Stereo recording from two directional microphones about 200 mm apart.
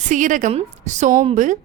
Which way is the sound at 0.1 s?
40° right (ahead or behind).